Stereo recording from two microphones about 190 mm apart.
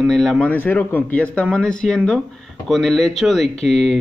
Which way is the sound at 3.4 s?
35° left (ahead or behind).